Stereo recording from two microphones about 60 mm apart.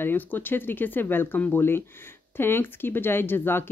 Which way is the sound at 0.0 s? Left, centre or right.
Left.